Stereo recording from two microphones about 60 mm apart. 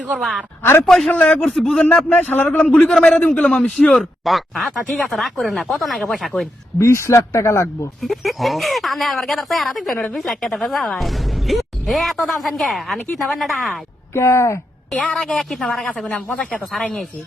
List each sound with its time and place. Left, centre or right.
0.8 s a man's voice: centre
1.1 s a man's voice: left
2.0 s a man's voice: left
2.6 s a man's voice: centre
3.2 s a man's voice: left
3.9 s a woman's voice: centre
6.7 s speech: left
8.0 s a woman's voice: centre
14.1 s speech: left
15.1 s a woman's voice: centre
16.3 s a man's voice: left